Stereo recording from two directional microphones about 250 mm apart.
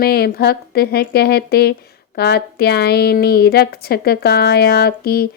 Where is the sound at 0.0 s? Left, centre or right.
Left.